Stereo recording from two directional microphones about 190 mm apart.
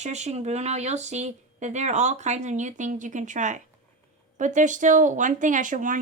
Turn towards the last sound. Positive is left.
turn(degrees=-45)  # may be behind; listen again after turning